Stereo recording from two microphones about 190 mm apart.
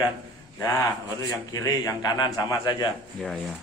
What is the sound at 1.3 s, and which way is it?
A man's voice, 20° left (ahead or behind).